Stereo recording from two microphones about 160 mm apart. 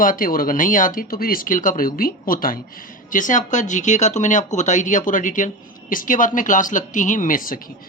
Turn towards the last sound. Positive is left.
turn(degrees=60)  # may be behind; listen again after turning